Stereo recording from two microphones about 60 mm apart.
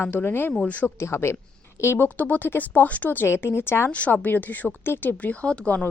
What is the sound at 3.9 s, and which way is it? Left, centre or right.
Speech, left.